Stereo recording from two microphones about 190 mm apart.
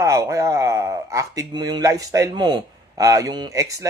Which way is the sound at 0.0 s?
15° right (ahead or behind).